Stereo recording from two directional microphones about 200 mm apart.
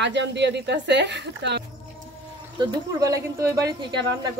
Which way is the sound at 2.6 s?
20° right (ahead or behind).